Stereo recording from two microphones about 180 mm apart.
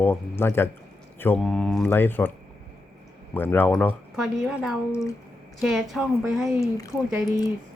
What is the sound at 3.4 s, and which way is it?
A woman's voice, 10° left (ahead or behind).